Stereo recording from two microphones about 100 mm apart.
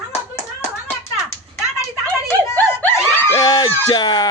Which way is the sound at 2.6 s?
20° left (ahead or behind).